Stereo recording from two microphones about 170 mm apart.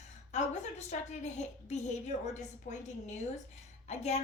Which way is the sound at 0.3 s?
45° left (ahead or behind).